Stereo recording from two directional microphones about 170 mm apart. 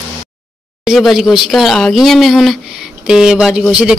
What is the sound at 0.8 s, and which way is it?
Speech, centre (ahead or behind).